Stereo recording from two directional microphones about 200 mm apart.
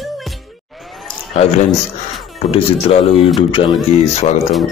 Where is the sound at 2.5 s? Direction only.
30° left (ahead or behind).